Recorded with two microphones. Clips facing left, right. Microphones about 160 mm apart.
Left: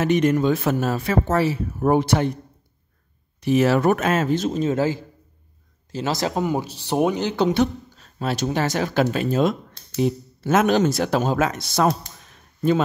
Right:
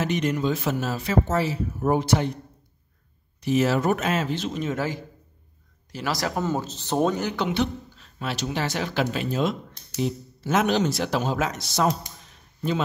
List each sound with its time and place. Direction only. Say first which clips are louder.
0.0 s a man's voice: left 6 dB; 50° left (ahead or behind)
3.3 s speech: left 4 dB; 60° left (ahead or behind); by 7.2 s 10° left (ahead or behind)
7.2 s speech: left 6 dB; 30° left (ahead or behind)
7.5 s speech: left 5 dB; 45° left (ahead or behind)